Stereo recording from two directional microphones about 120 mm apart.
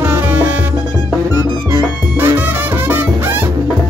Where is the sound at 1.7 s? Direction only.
20° right (ahead or behind).